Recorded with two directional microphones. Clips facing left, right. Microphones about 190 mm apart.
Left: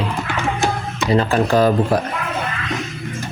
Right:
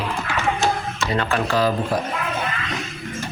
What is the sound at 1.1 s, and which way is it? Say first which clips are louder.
Speech: left 7 dB; 30° left (ahead or behind).